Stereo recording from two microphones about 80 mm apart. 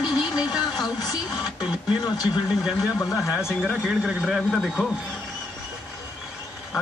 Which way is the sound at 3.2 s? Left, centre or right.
Left.